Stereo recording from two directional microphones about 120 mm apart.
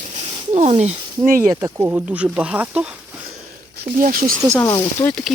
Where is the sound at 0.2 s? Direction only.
65° right (ahead or behind).